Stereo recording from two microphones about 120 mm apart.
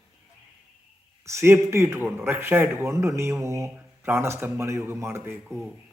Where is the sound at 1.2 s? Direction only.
20° right (ahead or behind).